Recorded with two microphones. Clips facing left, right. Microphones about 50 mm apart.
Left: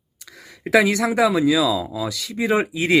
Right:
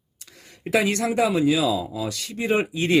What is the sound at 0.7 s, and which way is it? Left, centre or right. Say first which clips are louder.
Speech: left 5 dB; left.